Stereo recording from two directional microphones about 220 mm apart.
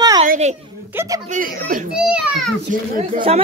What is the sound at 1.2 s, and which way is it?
Speech, 35° right (ahead or behind).